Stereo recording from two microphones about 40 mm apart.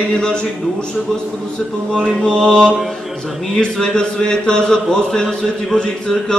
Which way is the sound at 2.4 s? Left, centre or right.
Left.